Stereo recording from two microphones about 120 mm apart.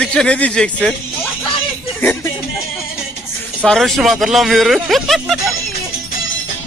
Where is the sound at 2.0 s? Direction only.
15° left (ahead or behind).